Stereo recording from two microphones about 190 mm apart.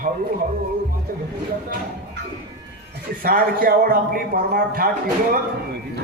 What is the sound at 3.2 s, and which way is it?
A man's voice, 50° right (ahead or behind).